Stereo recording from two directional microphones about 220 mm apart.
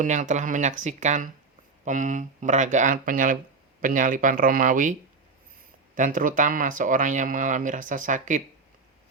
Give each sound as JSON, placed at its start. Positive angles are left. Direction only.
{"t": 0.0, "sound": "speech", "side_deg": -35}